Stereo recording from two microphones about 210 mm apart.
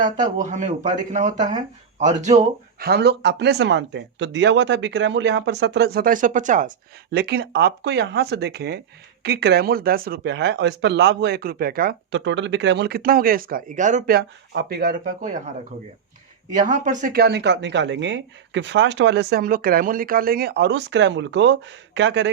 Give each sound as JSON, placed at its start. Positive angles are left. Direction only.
{"t": 0.3, "sound": "speech", "side_deg": -35}
{"t": 12.2, "sound": "speech", "side_deg": -60}
{"t": 14.2, "sound": "speech", "side_deg": -50}
{"t": 16.6, "sound": "speech", "side_deg": -35}